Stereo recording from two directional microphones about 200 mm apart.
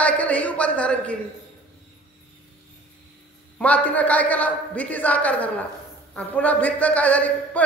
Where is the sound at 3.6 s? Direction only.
5° left (ahead or behind).